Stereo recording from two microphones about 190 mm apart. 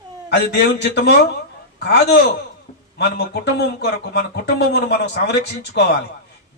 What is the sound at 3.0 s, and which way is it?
Speech, 55° left (ahead or behind).